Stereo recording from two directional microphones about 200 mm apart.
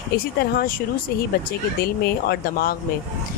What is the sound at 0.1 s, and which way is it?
Speech, 50° left (ahead or behind).